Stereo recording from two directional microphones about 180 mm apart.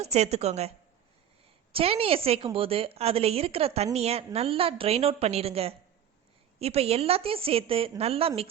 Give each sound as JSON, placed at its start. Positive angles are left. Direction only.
{"t": 0.0, "sound": "a woman's voice", "side_deg": -35}
{"t": 1.7, "sound": "a woman's voice", "side_deg": -30}